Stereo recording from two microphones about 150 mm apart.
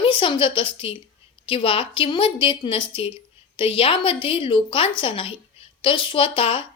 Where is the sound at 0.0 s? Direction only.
35° left (ahead or behind).